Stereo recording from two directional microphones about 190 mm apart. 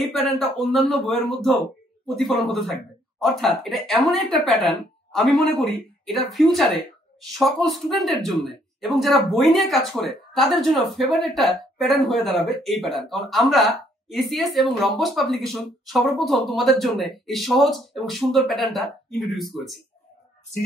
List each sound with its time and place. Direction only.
0.1 s speech: centre (ahead or behind)